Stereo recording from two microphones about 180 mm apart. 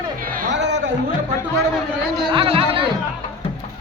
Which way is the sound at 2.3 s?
30° right (ahead or behind).